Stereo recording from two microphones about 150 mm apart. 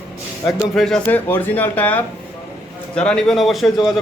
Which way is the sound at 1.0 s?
15° left (ahead or behind).